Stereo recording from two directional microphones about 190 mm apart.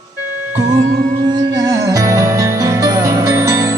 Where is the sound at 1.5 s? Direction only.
20° right (ahead or behind).